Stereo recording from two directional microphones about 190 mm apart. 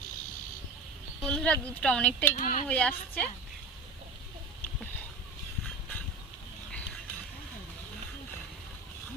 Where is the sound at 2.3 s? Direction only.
45° left (ahead or behind).